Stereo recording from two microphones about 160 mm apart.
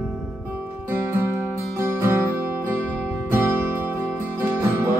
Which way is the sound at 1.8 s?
15° right (ahead or behind).